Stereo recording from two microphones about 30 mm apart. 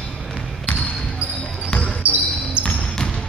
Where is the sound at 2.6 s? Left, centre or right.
Right.